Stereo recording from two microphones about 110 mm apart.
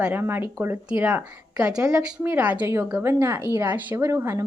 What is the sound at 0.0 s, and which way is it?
A woman's voice, 20° right (ahead or behind).